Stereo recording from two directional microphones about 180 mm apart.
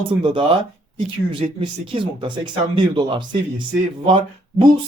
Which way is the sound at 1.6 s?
30° right (ahead or behind).